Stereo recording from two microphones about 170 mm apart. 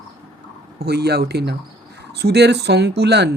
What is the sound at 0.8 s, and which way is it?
Speech, 70° right (ahead or behind).